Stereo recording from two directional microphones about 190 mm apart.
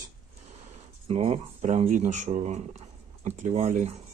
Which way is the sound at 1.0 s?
30° right (ahead or behind).